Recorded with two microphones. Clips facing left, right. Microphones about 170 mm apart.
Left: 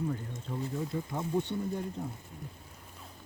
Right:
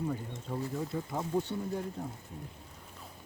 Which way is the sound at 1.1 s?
5° right (ahead or behind).